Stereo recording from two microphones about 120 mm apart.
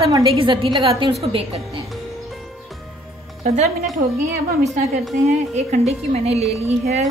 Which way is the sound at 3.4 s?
70° right (ahead or behind).